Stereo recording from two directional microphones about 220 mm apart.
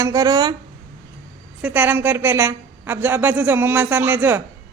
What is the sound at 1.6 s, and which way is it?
A woman's voice, 10° right (ahead or behind).